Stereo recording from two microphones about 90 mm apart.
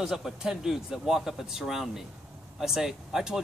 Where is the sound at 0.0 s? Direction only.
5° right (ahead or behind).